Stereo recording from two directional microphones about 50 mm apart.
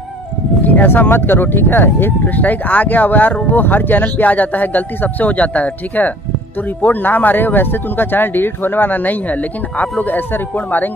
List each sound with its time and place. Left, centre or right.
0.7 s speech: left